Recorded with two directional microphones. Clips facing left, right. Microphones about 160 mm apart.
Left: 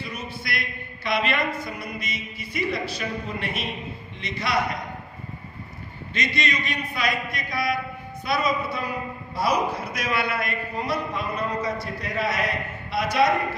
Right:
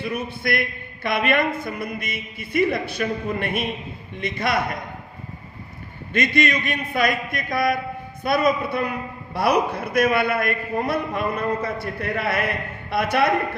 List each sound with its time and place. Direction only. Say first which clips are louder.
0.0 s a man's voice: right 8 dB; 55° right (ahead or behind)
6.1 s a man's voice: right 6 dB; 55° right (ahead or behind)